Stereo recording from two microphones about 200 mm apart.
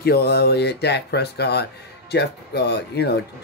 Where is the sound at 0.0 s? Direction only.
55° left (ahead or behind).